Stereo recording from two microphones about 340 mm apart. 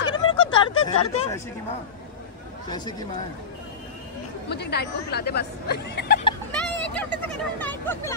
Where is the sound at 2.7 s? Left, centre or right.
Centre.